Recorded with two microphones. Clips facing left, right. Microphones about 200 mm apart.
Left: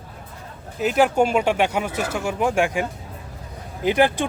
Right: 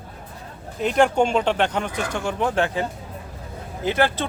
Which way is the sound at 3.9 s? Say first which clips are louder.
Left 3 dB; 15° left (ahead or behind).